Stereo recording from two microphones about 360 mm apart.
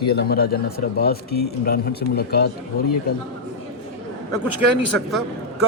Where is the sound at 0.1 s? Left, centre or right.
Left.